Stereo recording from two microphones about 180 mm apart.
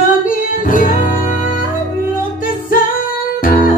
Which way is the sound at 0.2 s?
50° left (ahead or behind).